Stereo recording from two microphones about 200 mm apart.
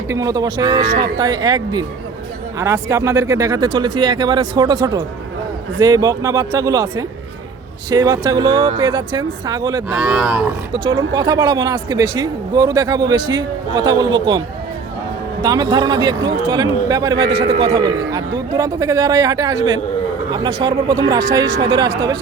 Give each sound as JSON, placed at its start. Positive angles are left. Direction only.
{"t": 0.1, "sound": "a man's voice", "side_deg": -15}
{"t": 7.9, "sound": "speech", "side_deg": -20}
{"t": 10.0, "sound": "a man's voice", "side_deg": -5}
{"t": 10.7, "sound": "a man's voice", "side_deg": -20}